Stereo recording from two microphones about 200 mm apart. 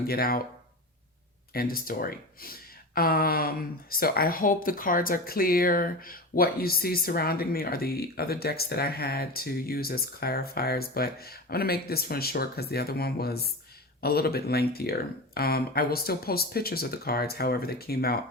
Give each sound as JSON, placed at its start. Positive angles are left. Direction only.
{"t": 0.1, "sound": "speech", "side_deg": 50}
{"t": 1.5, "sound": "speech", "side_deg": 45}